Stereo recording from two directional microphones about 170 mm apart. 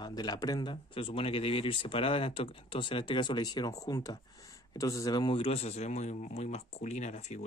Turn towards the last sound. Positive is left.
turn(degrees=40)  # may be behind; listen again after turning